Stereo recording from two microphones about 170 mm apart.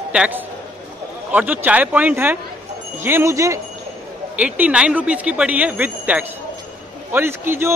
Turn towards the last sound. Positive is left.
turn(degrees=-15)  # may be behind; listen again after turning